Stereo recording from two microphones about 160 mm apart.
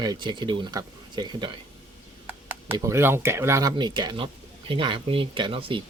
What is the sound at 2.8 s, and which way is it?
Speech, 15° right (ahead or behind).